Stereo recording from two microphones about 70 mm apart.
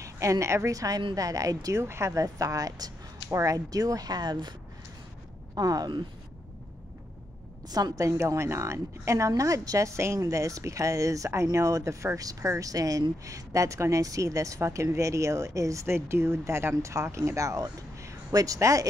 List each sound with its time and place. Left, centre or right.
0.0 s a woman's voice: right
0.7 s a woman's voice: right
1.8 s a woman's voice: right
5.5 s speech: right
8.0 s speech: right